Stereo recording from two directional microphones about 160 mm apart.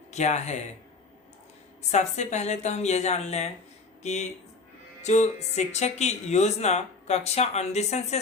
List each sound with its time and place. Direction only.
0.1 s speech: 45° left (ahead or behind)
1.9 s speech: 45° left (ahead or behind)